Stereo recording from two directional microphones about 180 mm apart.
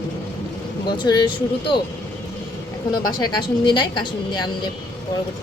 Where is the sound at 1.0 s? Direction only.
25° left (ahead or behind).